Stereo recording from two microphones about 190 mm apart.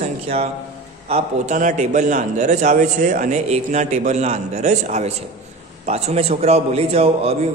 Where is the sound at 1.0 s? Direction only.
35° right (ahead or behind).